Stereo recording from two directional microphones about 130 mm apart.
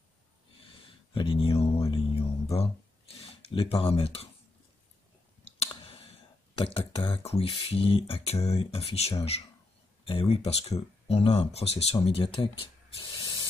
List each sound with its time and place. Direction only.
0.7 s a sound: 40° left (ahead or behind)
5.7 s clicking: 45° left (ahead or behind)
6.5 s speech: 45° left (ahead or behind)
13.0 s spray: 40° left (ahead or behind)